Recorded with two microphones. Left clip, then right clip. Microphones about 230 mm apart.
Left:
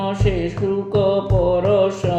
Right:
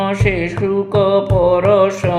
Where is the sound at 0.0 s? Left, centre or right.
Right.